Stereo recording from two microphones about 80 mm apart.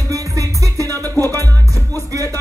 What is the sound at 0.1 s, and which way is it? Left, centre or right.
Music, right.